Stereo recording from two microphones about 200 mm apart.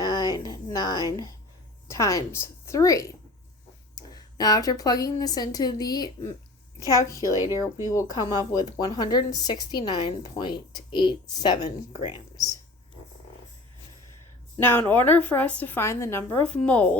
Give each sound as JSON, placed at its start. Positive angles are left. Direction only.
{"t": 0.0, "sound": "a sound", "side_deg": 20}
{"t": 1.9, "sound": "a woman's voice", "side_deg": 15}
{"t": 7.4, "sound": "speech", "side_deg": -15}
{"t": 7.9, "sound": "a woman's voice", "side_deg": 15}
{"t": 14.6, "sound": "a woman's voice", "side_deg": 10}